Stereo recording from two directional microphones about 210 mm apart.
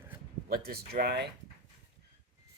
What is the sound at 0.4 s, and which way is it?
Speech, 45° right (ahead or behind).